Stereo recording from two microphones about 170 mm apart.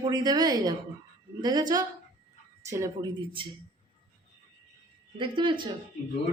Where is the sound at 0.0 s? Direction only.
25° right (ahead or behind).